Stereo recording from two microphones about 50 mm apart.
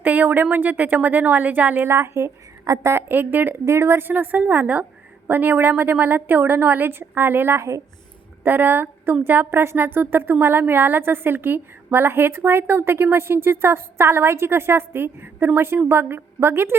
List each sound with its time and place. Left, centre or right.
0.0 s a woman's voice: right
1.9 s a woman's voice: right
3.1 s a woman's voice: right
3.7 s a woman's voice: right
4.0 s a woman's voice: right